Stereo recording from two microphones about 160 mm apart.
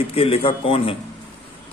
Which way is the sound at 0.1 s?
35° left (ahead or behind).